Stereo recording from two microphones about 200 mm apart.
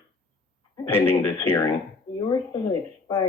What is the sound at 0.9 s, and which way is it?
Speech, 10° left (ahead or behind).